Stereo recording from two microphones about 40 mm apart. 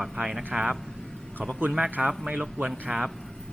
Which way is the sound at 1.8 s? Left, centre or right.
Right.